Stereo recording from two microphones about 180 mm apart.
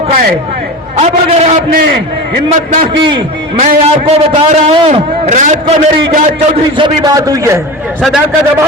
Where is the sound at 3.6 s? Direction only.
40° right (ahead or behind).